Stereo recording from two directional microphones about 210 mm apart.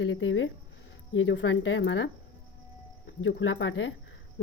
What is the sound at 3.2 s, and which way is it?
Speech, 65° left (ahead or behind).